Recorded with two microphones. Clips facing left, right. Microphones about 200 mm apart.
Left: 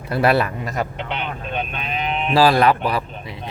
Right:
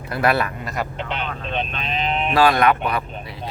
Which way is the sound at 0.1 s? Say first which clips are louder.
Left 3 dB; 35° left (ahead or behind).